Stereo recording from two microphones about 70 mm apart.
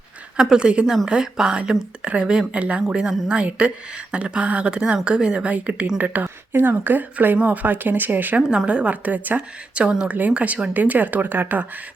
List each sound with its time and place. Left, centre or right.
0.3 s speech: centre
8.4 s speech: centre; by 11.6 s right